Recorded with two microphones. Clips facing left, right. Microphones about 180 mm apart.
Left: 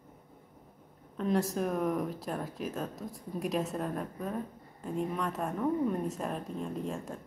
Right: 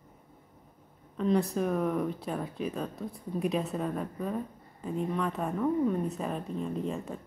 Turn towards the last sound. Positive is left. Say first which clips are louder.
# right 3 dB
turn(degrees=0)  # may be behind; listen again after turning